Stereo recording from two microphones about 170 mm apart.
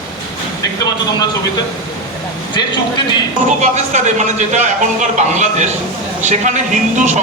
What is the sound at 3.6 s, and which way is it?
Speech, 45° right (ahead or behind).